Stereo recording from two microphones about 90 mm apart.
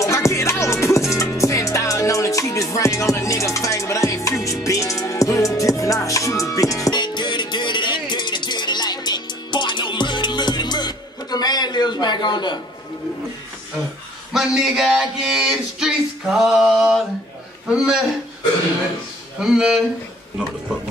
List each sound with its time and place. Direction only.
0.0 s music: 35° left (ahead or behind)
6.9 s music: 55° left (ahead or behind)
14.3 s male singing: 5° right (ahead or behind)
17.6 s a man's voice: 10° right (ahead or behind)
19.4 s a man's voice: 5° right (ahead or behind)